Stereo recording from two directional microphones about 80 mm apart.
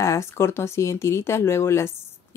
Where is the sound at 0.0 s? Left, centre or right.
Left.